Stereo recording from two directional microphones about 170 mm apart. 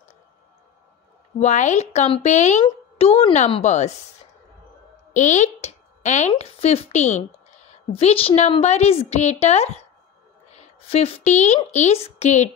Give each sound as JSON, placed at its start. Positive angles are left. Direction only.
{"t": 1.4, "sound": "a woman's voice", "side_deg": 45}
{"t": 5.1, "sound": "a woman's voice", "side_deg": 45}